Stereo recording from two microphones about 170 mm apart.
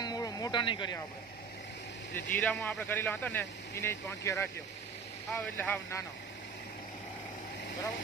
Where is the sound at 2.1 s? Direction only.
10° left (ahead or behind).